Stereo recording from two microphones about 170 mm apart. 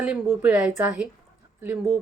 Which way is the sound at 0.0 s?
10° right (ahead or behind).